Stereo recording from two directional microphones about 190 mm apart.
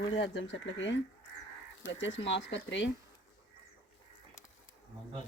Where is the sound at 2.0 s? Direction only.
75° left (ahead or behind).